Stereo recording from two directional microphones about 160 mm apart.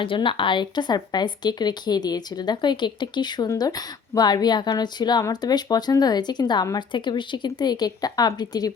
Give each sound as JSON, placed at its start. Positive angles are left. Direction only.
{"t": 0.0, "sound": "speech", "side_deg": 30}